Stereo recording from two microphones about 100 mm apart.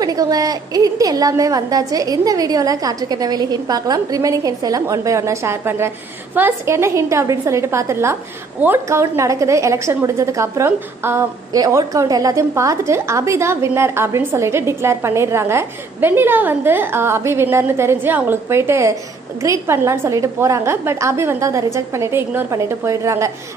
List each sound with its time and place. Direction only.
0.0 s a woman's voice: 40° right (ahead or behind)
11.5 s a woman's voice: 35° right (ahead or behind)